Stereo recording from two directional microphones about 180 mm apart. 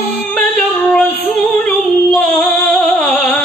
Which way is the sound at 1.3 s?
5° left (ahead or behind).